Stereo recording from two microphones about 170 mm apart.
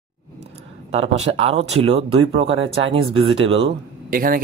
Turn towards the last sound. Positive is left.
turn(degrees=-55)  # may be behind; listen again after turning